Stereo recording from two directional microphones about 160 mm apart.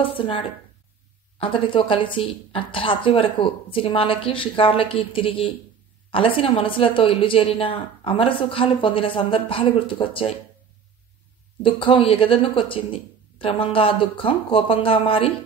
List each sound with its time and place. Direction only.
0.0 s speech: 35° left (ahead or behind)
11.6 s speech: 35° left (ahead or behind)